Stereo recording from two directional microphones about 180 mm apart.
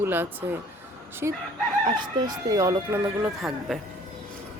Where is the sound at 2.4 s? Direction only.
20° right (ahead or behind).